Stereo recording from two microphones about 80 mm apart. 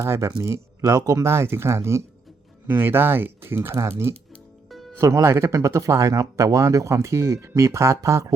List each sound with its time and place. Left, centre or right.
0.0 s speech: right